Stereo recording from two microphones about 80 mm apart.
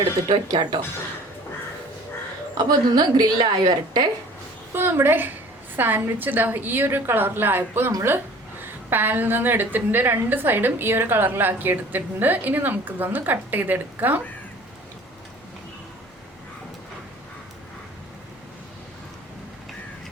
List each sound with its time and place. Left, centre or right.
0.3 s speech: right
2.6 s a woman's voice: right
4.7 s a woman's voice: right